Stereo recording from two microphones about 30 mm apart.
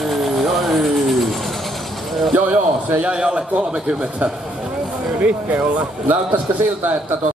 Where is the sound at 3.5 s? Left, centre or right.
Right.